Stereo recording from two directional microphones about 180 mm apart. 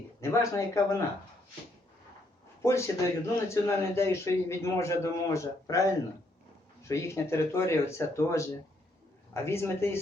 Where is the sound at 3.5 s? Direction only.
15° left (ahead or behind).